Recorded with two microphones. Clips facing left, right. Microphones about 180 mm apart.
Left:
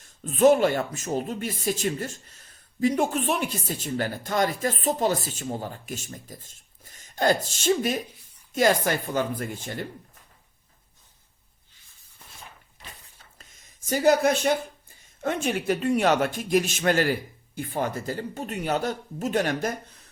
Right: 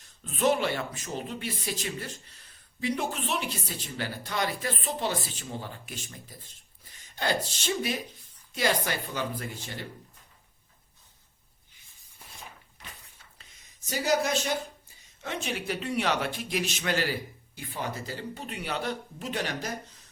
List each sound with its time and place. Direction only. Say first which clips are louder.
0.0 s speech: left 8 dB; 45° left (ahead or behind)
13.4 s a sound: left 3 dB; 50° left (ahead or behind)
15.2 s speech: left 7 dB; 50° left (ahead or behind)